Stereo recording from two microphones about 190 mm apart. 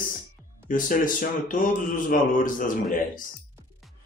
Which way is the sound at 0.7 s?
45° left (ahead or behind).